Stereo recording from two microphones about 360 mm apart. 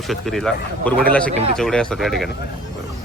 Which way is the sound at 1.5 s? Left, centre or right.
Centre.